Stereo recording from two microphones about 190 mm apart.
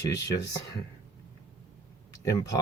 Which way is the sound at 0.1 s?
20° left (ahead or behind).